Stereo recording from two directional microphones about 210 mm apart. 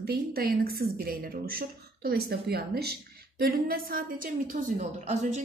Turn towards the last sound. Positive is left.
turn(degrees=-35)  # may be behind; listen again after turning